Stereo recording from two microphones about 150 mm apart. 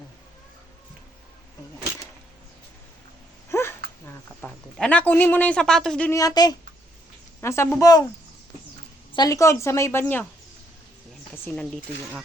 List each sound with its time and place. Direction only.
3.5 s a sound: 15° left (ahead or behind)
4.0 s a man's voice: 10° left (ahead or behind)
6.1 s a woman's voice: 25° left (ahead or behind)
9.1 s a woman's voice: 25° left (ahead or behind)
11.4 s a man's voice: 5° left (ahead or behind)